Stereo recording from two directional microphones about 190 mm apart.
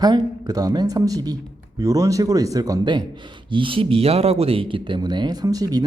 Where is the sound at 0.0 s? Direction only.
20° right (ahead or behind).